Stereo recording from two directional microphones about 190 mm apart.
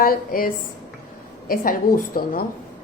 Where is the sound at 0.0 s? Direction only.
50° left (ahead or behind).